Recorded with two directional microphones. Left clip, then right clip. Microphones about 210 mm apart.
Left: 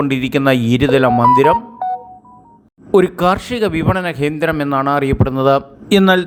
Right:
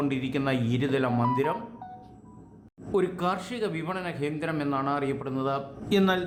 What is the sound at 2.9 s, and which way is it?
A man's voice, 40° left (ahead or behind).